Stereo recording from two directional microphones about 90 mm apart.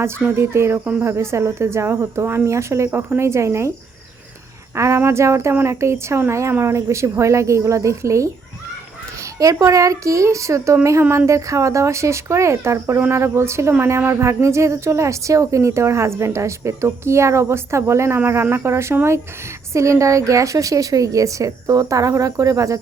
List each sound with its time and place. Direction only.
0.3 s a woman's voice: 30° right (ahead or behind)
4.7 s a woman's voice: 30° right (ahead or behind)
9.4 s a woman's voice: 40° right (ahead or behind)